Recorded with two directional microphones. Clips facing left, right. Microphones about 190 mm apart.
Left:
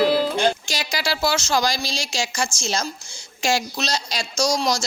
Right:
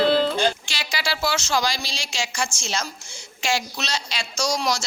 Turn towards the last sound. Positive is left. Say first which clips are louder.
# left 3 dB
turn(degrees=35)  # may be behind; listen again after turning